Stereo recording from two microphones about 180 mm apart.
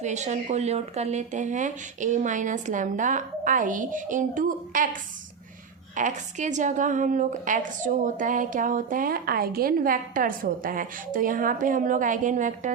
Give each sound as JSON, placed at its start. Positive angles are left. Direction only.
{"t": 0.0, "sound": "speech", "side_deg": -40}
{"t": 6.0, "sound": "speech", "side_deg": -40}